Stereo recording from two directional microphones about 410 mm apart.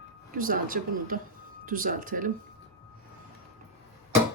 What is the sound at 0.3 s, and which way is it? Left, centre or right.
Speech, centre.